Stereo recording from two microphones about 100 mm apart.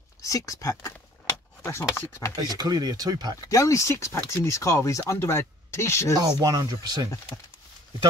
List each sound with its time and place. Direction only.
0.2 s speech: 35° left (ahead or behind)
2.3 s speech: 40° right (ahead or behind)
3.4 s speech: 30° left (ahead or behind)
6.1 s speech: 40° right (ahead or behind)